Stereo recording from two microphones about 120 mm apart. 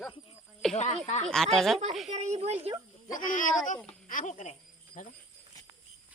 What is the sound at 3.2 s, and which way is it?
Speech, 90° left.